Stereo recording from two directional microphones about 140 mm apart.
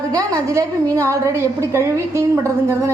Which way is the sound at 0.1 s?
25° right (ahead or behind).